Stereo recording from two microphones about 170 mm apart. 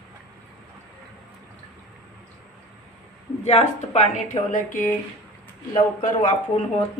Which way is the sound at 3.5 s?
40° left (ahead or behind).